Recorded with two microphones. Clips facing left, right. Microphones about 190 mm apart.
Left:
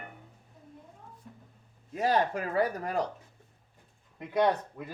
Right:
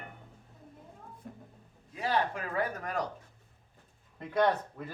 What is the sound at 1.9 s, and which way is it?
Speech, 40° left (ahead or behind).